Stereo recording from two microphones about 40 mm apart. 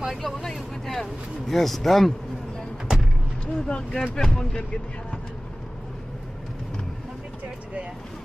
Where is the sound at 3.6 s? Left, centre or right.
Left.